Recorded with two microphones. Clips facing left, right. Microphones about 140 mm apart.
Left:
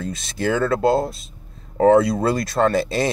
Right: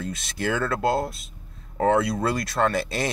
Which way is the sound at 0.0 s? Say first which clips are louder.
Left 4 dB; 35° left (ahead or behind).